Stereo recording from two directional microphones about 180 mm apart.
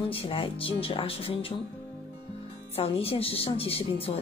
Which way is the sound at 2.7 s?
30° left (ahead or behind).